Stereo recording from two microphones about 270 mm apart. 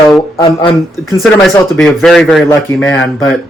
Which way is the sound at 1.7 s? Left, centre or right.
Centre.